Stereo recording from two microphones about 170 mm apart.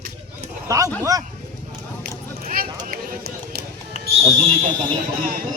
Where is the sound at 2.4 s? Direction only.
60° right (ahead or behind).